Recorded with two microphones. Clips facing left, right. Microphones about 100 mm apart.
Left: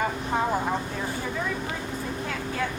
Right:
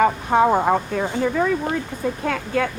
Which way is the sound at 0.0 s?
75° right (ahead or behind).